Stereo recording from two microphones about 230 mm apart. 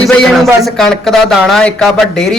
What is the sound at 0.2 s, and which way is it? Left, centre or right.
Speech, centre.